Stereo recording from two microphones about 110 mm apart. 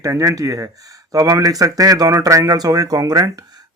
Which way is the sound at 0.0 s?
30° right (ahead or behind).